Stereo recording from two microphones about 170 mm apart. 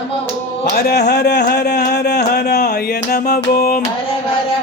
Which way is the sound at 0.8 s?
70° left (ahead or behind).